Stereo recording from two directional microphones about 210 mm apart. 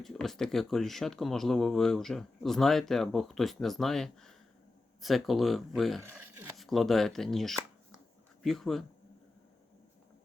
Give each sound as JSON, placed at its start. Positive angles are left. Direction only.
{"t": 0.0, "sound": "speech", "side_deg": 0}
{"t": 6.0, "sound": "speech", "side_deg": -10}
{"t": 6.6, "sound": "speech", "side_deg": 0}